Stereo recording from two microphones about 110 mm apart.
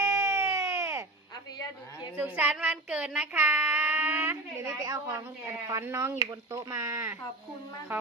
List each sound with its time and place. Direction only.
0.0 s a sound: 25° right (ahead or behind)
2.1 s speech: 20° right (ahead or behind)
4.6 s a woman's voice: 35° right (ahead or behind)